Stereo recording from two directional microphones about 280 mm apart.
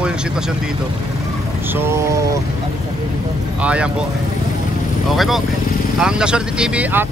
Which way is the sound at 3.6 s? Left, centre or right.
Centre.